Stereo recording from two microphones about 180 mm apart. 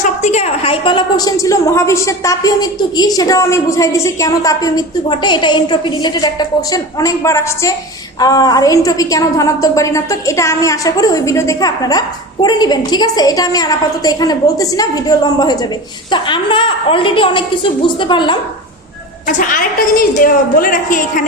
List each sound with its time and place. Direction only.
0.0 s a woman's voice: 40° left (ahead or behind)
19.3 s a woman's voice: 50° left (ahead or behind)